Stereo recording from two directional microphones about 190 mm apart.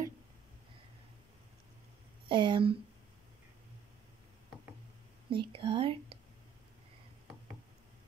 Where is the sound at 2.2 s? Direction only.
25° right (ahead or behind).